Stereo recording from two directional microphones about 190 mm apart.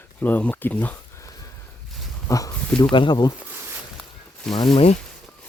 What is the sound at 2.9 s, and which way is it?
Speech, 25° left (ahead or behind).